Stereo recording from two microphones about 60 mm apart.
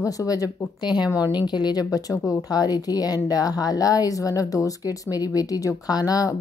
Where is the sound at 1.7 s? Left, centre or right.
Left.